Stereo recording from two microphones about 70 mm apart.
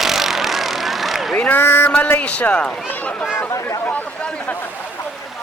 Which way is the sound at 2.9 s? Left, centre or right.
Left.